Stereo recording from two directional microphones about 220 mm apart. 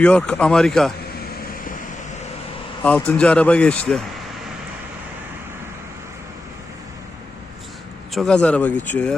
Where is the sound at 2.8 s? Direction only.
5° left (ahead or behind).